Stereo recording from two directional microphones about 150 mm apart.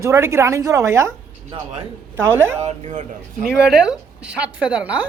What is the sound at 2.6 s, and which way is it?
Speech, 55° right (ahead or behind).